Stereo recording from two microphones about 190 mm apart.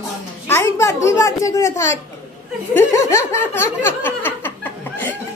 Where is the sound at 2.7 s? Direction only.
15° left (ahead or behind).